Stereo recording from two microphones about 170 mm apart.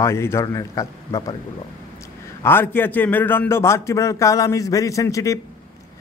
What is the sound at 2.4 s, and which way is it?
A man's voice, 10° left (ahead or behind).